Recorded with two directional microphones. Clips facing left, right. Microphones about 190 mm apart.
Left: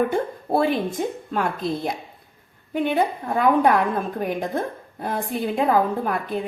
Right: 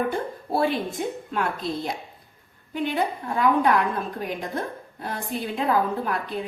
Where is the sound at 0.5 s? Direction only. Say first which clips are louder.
Left 3 dB; 45° left (ahead or behind).